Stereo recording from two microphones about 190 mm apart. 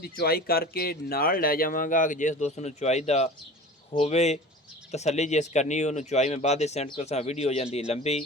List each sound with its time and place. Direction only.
0.0 s speech: 55° left (ahead or behind); by 8.2 s 35° left (ahead or behind)